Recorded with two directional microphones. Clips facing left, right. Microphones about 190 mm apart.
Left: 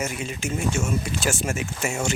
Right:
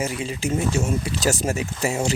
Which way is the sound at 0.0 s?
30° right (ahead or behind).